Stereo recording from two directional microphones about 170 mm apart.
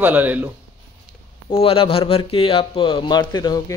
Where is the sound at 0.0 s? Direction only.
10° right (ahead or behind).